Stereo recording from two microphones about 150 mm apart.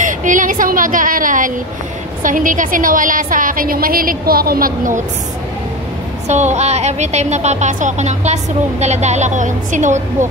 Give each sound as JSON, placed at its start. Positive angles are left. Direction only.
{"t": 0.0, "sound": "a woman's voice", "side_deg": -60}
{"t": 6.2, "sound": "a woman's voice", "side_deg": -50}